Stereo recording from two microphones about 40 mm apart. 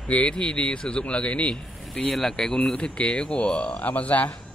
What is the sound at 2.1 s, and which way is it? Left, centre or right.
Speech, centre.